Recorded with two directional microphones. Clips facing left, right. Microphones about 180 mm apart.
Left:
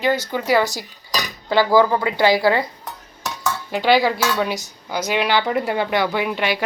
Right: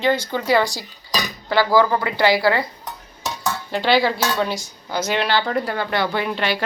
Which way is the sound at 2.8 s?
15° right (ahead or behind).